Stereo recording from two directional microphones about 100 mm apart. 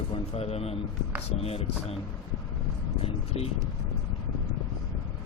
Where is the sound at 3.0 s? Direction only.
90° left.